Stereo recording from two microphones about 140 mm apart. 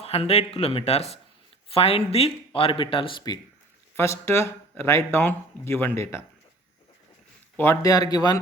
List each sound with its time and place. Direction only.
0.0 s speech: 45° left (ahead or behind)
3.9 s speech: 20° left (ahead or behind)
7.5 s speech: 15° left (ahead or behind)